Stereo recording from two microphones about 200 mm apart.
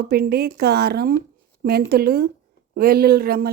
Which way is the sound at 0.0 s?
50° right (ahead or behind).